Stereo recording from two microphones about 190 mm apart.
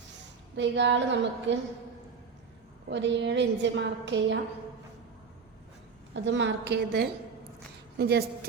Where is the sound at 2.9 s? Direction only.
70° right (ahead or behind).